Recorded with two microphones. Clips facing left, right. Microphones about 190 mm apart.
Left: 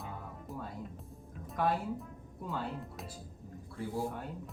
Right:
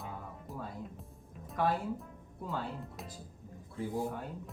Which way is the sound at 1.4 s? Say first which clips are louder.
Even; centre (ahead or behind).